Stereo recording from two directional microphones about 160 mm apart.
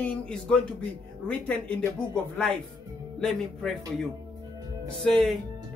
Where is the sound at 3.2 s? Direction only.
Centre (ahead or behind).